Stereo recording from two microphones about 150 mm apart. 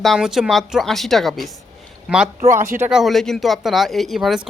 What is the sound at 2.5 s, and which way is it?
Speech, 20° right (ahead or behind).